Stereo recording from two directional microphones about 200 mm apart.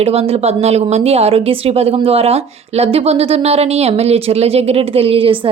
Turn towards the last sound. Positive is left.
turn(degrees=-25)  # may be behind; listen again after turning